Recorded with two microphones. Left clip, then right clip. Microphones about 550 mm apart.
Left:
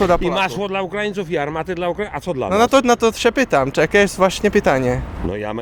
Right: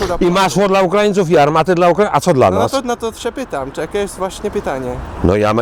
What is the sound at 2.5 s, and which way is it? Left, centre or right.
Speech, left.